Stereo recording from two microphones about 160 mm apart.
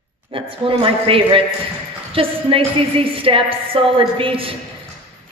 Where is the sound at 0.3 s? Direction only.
35° right (ahead or behind).